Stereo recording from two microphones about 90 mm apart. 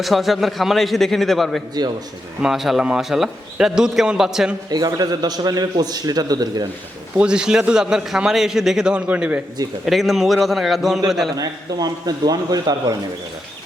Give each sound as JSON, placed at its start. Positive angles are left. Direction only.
{"t": 0.0, "sound": "a man's voice", "side_deg": 0}
{"t": 4.7, "sound": "a man's voice", "side_deg": -45}
{"t": 7.2, "sound": "a man's voice", "side_deg": -10}
{"t": 9.8, "sound": "a man's voice", "side_deg": 0}
{"t": 11.3, "sound": "a man's voice", "side_deg": -45}